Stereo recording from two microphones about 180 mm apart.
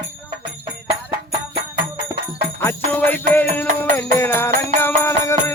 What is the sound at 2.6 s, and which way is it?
Jingle bell, 10° left (ahead or behind).